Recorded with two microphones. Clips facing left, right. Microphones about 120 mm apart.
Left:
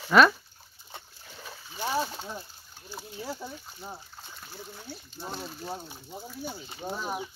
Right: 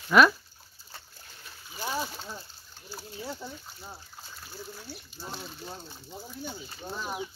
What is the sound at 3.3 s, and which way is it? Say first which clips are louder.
Speech: left 1 dB; 15° left (ahead or behind).